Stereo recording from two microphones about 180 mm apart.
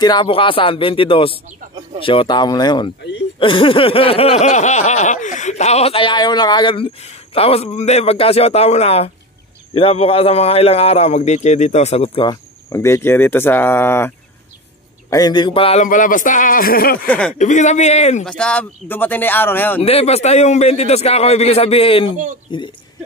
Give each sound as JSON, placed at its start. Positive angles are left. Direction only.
{"t": 0.0, "sound": "speech", "side_deg": 25}
{"t": 3.3, "sound": "snicker", "side_deg": 30}
{"t": 12.6, "sound": "speech", "side_deg": 15}
{"t": 15.8, "sound": "a man's voice", "side_deg": 45}
{"t": 17.3, "sound": "snicker", "side_deg": 40}
{"t": 18.2, "sound": "speech", "side_deg": 5}
{"t": 19.8, "sound": "snicker", "side_deg": 35}
{"t": 22.1, "sound": "speech", "side_deg": -45}